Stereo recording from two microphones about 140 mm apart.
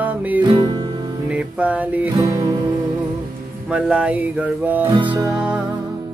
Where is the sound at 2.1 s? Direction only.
30° right (ahead or behind).